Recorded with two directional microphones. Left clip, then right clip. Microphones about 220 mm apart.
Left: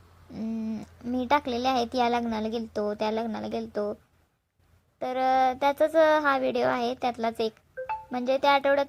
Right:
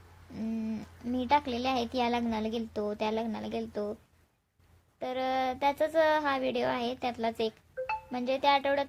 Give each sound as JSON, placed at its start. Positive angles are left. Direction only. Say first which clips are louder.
{"t": 0.3, "sound": "speech", "louder": "left 3 dB", "side_deg": 15}
{"t": 4.9, "sound": "speech", "louder": "left 7 dB", "side_deg": 20}